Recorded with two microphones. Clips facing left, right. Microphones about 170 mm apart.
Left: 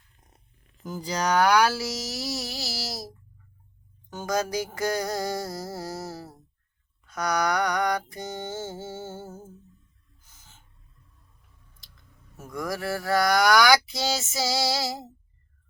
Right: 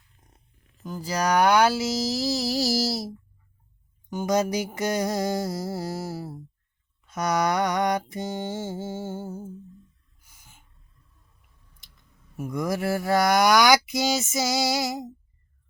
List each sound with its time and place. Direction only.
0.9 s speech: 5° left (ahead or behind)
1.1 s music: 10° right (ahead or behind)
1.5 s speech: 20° right (ahead or behind); by 2.9 s 40° right (ahead or behind)
2.9 s speech: 25° right (ahead or behind)
9.0 s music: 10° right (ahead or behind)
10.2 s a sound: 10° right (ahead or behind)
12.4 s speech: 20° right (ahead or behind)